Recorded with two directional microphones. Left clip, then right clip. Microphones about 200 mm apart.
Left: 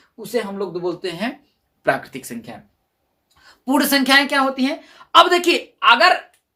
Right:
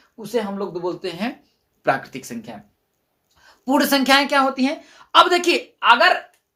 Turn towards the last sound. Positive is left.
turn(degrees=0)  # may be behind; listen again after turning